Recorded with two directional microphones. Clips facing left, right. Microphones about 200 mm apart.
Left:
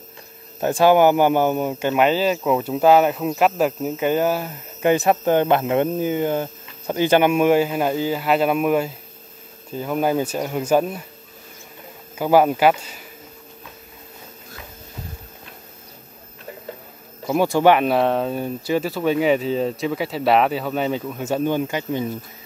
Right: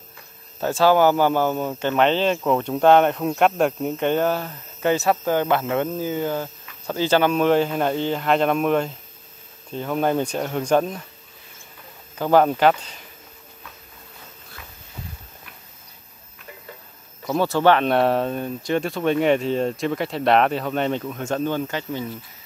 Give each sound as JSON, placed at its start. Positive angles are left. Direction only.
{"t": 0.6, "sound": "speech", "side_deg": 15}
{"t": 12.2, "sound": "speech", "side_deg": 10}
{"t": 17.3, "sound": "speech", "side_deg": 15}